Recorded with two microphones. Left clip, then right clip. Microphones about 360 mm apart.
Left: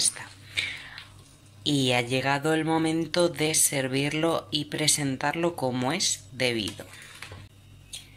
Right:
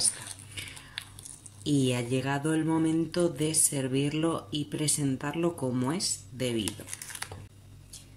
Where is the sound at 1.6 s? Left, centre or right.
Centre.